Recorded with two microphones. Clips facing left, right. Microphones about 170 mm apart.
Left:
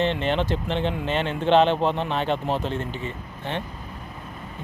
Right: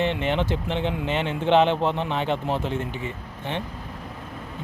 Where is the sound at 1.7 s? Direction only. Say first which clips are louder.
Left 1 dB; 15° left (ahead or behind).